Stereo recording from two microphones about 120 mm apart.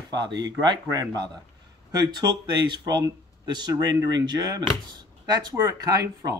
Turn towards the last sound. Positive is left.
turn(degrees=-30)  # may be behind; listen again after turning